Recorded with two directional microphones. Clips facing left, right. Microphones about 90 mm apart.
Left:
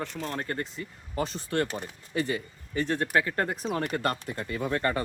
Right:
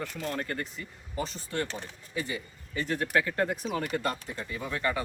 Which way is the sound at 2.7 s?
35° left (ahead or behind).